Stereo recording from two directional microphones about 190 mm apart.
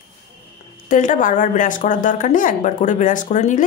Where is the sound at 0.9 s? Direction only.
45° left (ahead or behind).